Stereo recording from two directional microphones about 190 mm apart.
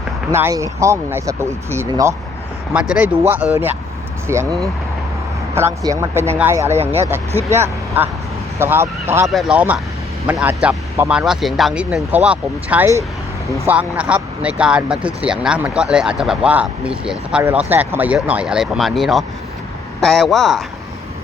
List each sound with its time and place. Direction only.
0.3 s speech: 15° right (ahead or behind)
2.7 s speech: 5° right (ahead or behind)
5.5 s speech: 15° right (ahead or behind)
9.2 s speech: centre (ahead or behind)